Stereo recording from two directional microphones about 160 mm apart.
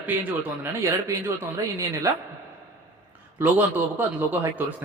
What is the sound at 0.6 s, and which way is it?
A man's voice, 15° right (ahead or behind).